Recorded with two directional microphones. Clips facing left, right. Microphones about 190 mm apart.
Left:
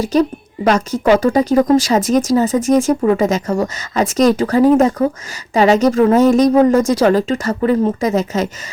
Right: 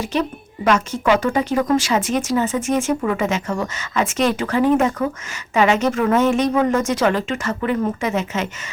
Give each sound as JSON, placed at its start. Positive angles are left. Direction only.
{"t": 0.0, "sound": "a woman's voice", "side_deg": 40}